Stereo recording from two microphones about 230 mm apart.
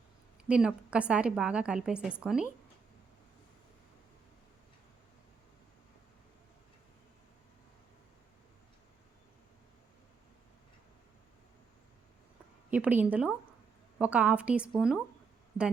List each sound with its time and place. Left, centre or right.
0.4 s a woman's voice: centre
12.7 s a woman's voice: centre